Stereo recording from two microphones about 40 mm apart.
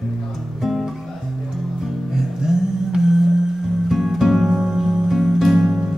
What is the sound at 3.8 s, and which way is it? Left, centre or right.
Music, centre.